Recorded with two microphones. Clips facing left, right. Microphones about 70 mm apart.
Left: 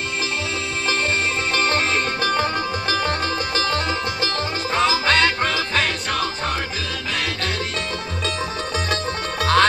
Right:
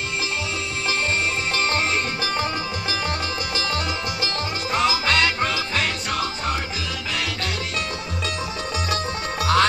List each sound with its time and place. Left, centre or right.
1.5 s music: left
8.7 s music: left